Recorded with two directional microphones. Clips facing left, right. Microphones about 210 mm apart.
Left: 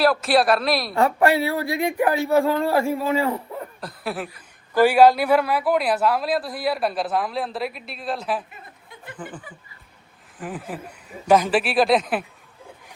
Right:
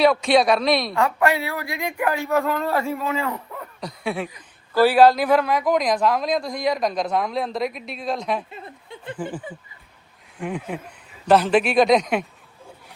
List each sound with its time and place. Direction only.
0.0 s speech: 5° left (ahead or behind)
0.9 s speech: 35° left (ahead or behind)
3.8 s speech: centre (ahead or behind)
4.7 s speech: 15° left (ahead or behind)
8.4 s a sound: 25° right (ahead or behind)
9.5 s speech: 25° right (ahead or behind)
10.3 s speech: 5° left (ahead or behind)